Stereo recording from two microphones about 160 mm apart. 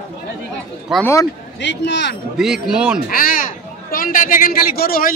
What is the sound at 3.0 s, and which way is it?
A man's voice, 60° left (ahead or behind).